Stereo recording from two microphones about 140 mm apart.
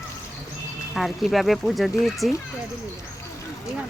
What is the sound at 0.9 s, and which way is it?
A woman's voice, centre (ahead or behind).